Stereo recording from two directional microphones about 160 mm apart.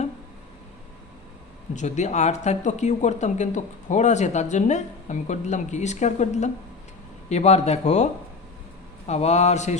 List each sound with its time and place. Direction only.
1.7 s speech: 45° left (ahead or behind)